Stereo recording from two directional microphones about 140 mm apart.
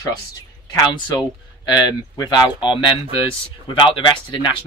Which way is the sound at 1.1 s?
30° left (ahead or behind).